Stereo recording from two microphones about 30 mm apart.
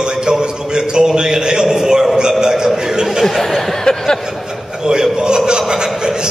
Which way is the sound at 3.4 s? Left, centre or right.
Centre.